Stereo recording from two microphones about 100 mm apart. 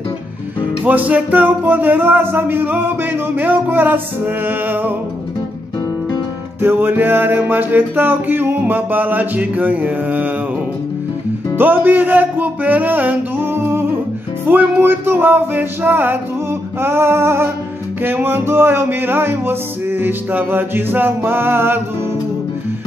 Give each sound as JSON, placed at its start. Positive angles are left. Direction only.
{"t": 0.8, "sound": "music", "side_deg": -15}
{"t": 6.6, "sound": "music", "side_deg": -20}
{"t": 11.5, "sound": "music", "side_deg": -20}